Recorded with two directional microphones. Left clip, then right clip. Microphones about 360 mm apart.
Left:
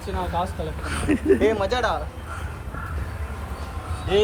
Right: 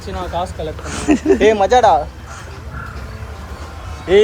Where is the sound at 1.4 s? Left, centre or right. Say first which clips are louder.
Right 11 dB; right.